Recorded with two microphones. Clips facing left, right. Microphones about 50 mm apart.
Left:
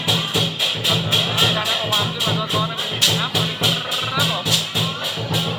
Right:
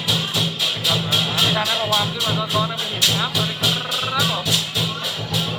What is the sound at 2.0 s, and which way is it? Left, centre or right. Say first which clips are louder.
Speech: even; centre.